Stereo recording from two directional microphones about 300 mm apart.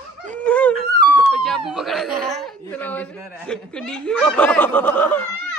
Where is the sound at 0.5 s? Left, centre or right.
Centre.